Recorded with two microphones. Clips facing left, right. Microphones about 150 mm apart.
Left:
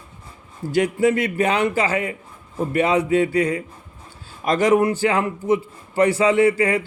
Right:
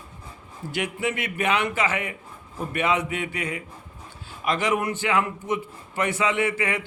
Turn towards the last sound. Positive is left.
turn(degrees=35)  # may be behind; listen again after turning